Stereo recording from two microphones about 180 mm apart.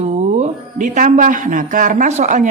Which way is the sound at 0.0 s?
40° right (ahead or behind).